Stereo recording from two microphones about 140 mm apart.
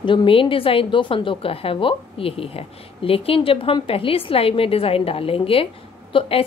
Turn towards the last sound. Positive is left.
turn(degrees=40)  # may be behind; listen again after turning